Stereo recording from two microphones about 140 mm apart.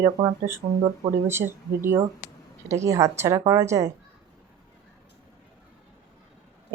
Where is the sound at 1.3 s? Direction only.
15° right (ahead or behind).